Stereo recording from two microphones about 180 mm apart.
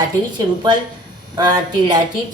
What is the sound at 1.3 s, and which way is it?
Speech, 20° right (ahead or behind).